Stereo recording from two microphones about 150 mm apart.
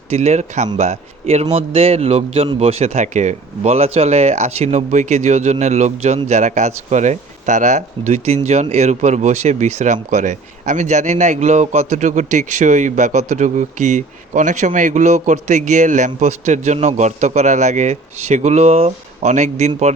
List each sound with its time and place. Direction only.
0.1 s speech: 50° right (ahead or behind)